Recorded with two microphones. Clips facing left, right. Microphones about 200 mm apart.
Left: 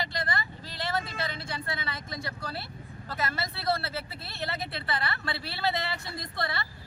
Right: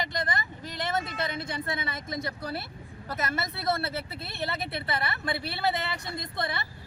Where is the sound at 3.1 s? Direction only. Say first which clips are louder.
Right 1 dB; 20° right (ahead or behind).